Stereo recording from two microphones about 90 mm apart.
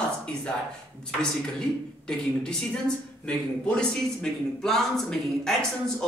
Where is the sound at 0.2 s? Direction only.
10° left (ahead or behind).